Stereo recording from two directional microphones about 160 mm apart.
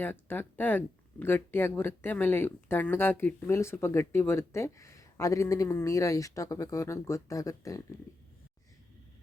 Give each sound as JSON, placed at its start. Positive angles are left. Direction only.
{"t": 0.0, "sound": "speech", "side_deg": 10}